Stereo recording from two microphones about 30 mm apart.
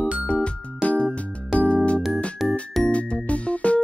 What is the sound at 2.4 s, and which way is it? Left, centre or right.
Music, centre.